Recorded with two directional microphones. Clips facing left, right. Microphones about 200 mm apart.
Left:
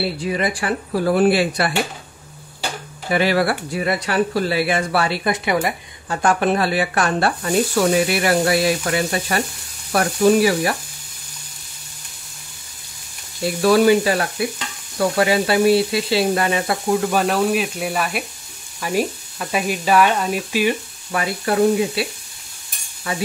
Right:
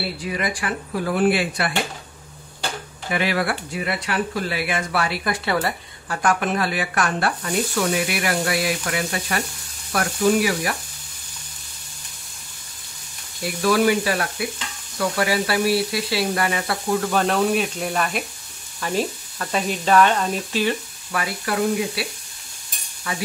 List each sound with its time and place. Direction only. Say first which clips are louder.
0.2 s speech: left 4 dB; 30° left (ahead or behind)
3.1 s speech: left 5 dB; 35° left (ahead or behind)
13.4 s speech: left 4 dB; 30° left (ahead or behind)
17.1 s speech: left 2 dB; 5° left (ahead or behind)
21.1 s speech: left 4 dB; 25° left (ahead or behind)